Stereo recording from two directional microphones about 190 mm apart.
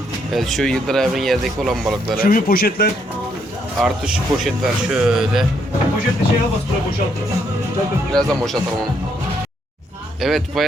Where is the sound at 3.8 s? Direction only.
5° right (ahead or behind).